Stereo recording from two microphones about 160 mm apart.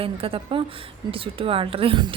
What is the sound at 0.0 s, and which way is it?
A woman's voice, 35° right (ahead or behind).